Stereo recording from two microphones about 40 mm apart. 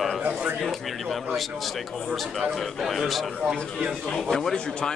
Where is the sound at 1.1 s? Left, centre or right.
Centre.